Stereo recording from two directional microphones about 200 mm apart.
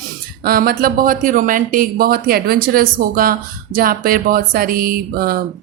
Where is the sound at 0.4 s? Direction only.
45° right (ahead or behind).